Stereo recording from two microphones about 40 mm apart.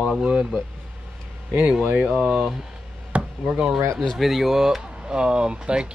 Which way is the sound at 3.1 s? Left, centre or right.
Right.